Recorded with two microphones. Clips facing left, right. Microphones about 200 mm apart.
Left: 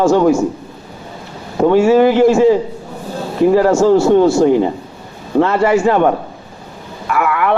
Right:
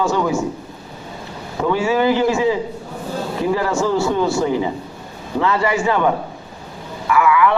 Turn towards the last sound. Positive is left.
turn(degrees=55)  # may be behind; listen again after turning